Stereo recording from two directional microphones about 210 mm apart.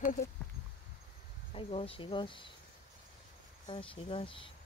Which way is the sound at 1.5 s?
25° left (ahead or behind).